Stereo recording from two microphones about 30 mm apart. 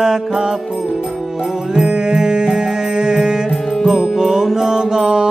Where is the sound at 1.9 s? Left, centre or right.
Right.